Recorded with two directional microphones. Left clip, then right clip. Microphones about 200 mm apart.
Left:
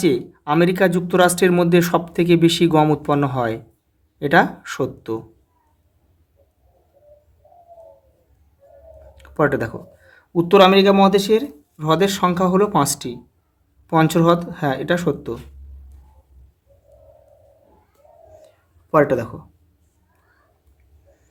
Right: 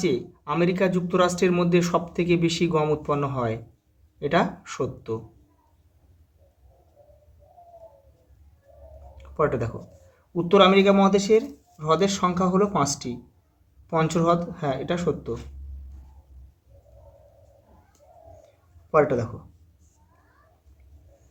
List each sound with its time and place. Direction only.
0.0 s speech: 50° left (ahead or behind)
10.3 s speech: 55° left (ahead or behind)